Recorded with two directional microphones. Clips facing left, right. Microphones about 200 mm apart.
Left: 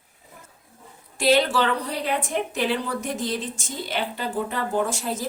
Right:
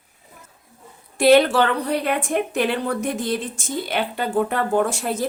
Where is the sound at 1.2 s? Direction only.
60° right (ahead or behind).